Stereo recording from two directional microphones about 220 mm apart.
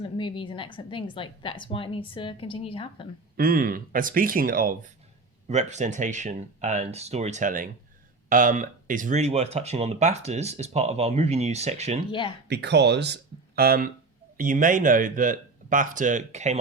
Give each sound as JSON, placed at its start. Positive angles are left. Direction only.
{"t": 0.0, "sound": "a woman's voice", "side_deg": 20}
{"t": 3.3, "sound": "speech", "side_deg": -40}
{"t": 12.5, "sound": "speech", "side_deg": -50}